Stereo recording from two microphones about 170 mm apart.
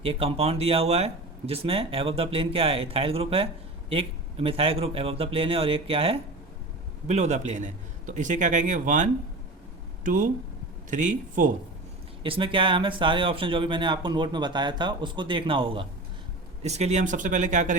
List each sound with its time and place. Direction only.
0.0 s a man's voice: 35° right (ahead or behind)
12.2 s a man's voice: 30° right (ahead or behind); by 17.7 s 50° right (ahead or behind)